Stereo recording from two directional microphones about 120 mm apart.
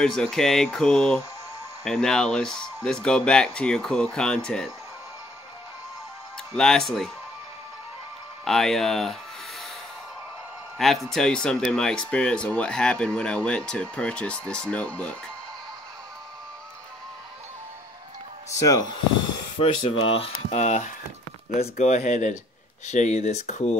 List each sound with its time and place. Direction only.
0.0 s speech: 5° left (ahead or behind)
6.5 s speech: 5° left (ahead or behind)
8.5 s speech: 5° left (ahead or behind)
10.8 s speech: centre (ahead or behind)
18.6 s speech: 30° left (ahead or behind)
19.6 s speech: 55° left (ahead or behind)